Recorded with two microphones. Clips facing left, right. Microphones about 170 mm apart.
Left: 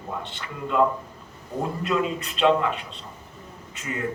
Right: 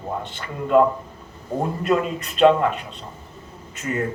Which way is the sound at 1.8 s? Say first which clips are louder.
Right 3 dB; 50° right (ahead or behind).